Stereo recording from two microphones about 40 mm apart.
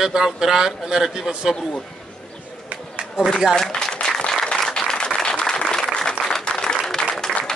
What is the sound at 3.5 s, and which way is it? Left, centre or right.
Applause, centre.